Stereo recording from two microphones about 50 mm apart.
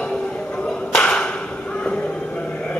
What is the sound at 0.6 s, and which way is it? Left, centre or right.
Whip, centre.